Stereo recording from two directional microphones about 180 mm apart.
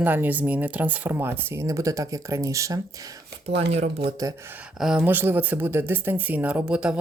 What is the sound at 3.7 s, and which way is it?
Speech, 35° right (ahead or behind).